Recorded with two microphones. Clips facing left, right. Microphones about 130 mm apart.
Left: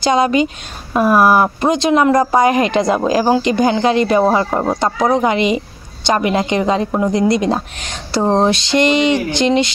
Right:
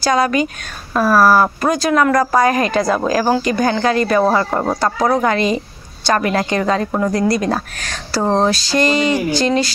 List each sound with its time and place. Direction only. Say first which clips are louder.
0.0 s speech: left 2 dB; 20° left (ahead or behind)
4.5 s speech: left 1 dB; 5° left (ahead or behind)
4.7 s speech: left 1 dB; 20° left (ahead or behind)